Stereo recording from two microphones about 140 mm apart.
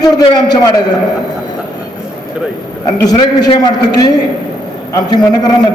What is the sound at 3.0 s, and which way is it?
A man's voice, 30° left (ahead or behind).